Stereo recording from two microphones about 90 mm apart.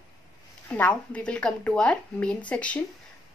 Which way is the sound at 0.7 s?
15° left (ahead or behind).